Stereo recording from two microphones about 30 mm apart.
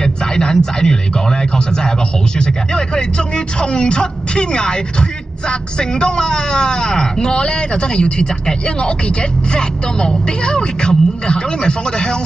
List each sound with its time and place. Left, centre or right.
0.0 s a man's voice: left